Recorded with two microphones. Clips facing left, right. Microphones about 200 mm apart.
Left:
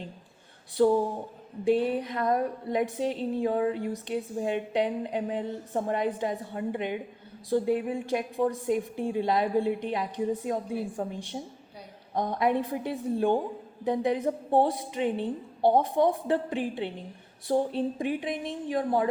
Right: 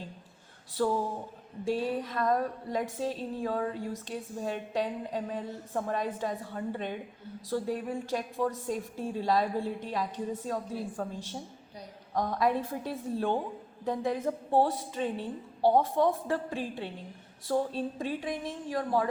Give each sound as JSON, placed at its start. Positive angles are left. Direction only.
{"t": 0.8, "sound": "a woman's voice", "side_deg": 20}